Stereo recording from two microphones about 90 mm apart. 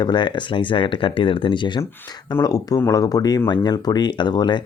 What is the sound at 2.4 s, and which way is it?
Speech, 45° left (ahead or behind).